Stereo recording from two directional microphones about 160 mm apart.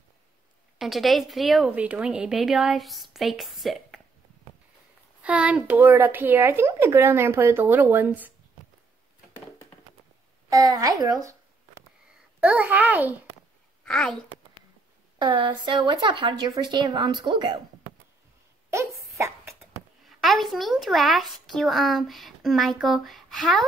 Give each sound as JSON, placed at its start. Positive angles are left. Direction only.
{"t": 0.7, "sound": "a woman's voice", "side_deg": 0}
{"t": 5.2, "sound": "speech", "side_deg": -10}
{"t": 10.5, "sound": "speech", "side_deg": -20}
{"t": 12.4, "sound": "speech", "side_deg": -10}
{"t": 13.8, "sound": "speech", "side_deg": 5}
{"t": 15.1, "sound": "speech", "side_deg": -30}
{"t": 18.9, "sound": "a sound", "side_deg": -15}
{"t": 20.1, "sound": "speech", "side_deg": 0}